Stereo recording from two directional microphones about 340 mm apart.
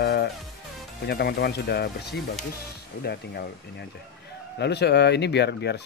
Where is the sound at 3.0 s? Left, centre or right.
Left.